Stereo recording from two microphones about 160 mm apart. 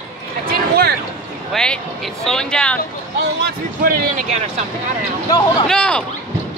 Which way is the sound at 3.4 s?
70° right (ahead or behind).